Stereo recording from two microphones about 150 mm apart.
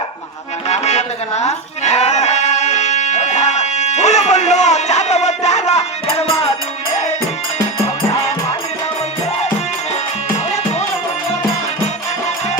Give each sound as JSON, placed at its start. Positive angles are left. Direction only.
{"t": 0.7, "sound": "music", "side_deg": 45}